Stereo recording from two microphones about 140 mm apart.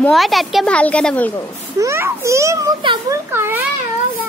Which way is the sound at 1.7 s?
20° right (ahead or behind).